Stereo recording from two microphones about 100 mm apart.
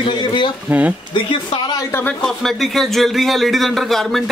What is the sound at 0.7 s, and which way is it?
Speech, 15° right (ahead or behind).